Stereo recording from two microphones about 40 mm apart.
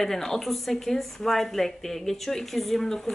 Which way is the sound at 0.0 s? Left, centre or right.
Centre.